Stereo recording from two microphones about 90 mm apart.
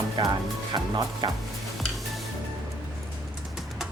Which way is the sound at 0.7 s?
55° right (ahead or behind).